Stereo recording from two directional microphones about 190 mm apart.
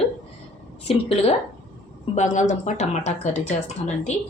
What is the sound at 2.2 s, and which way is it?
Speech, 40° left (ahead or behind).